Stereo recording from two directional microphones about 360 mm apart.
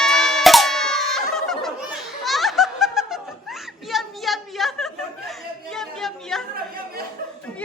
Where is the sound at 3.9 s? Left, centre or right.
Centre.